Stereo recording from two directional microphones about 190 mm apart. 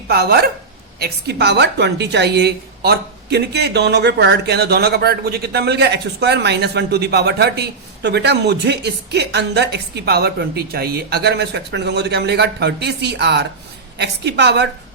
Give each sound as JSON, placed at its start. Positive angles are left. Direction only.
{"t": 0.1, "sound": "a woman's voice", "side_deg": -55}